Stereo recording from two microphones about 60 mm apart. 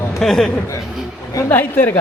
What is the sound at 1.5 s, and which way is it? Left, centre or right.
Speech, left.